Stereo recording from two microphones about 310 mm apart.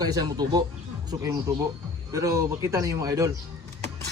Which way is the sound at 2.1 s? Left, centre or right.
Centre.